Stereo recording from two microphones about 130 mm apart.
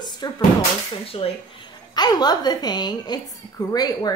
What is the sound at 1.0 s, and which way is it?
A woman's voice, 45° left (ahead or behind).